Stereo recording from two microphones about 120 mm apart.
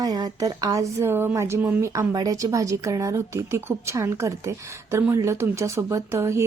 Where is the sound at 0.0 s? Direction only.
35° right (ahead or behind).